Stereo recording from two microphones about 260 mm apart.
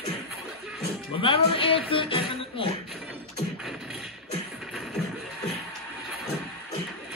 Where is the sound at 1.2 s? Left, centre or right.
Left.